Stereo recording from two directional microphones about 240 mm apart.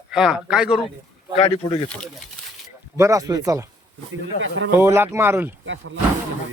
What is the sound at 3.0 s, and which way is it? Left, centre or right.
Speech, centre.